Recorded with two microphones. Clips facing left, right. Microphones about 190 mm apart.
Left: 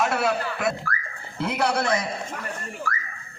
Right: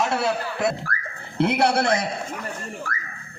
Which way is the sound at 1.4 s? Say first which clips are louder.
Right 6 dB; 70° right (ahead or behind).